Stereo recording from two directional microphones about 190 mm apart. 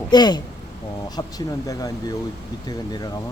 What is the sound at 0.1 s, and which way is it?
Speech, 20° left (ahead or behind).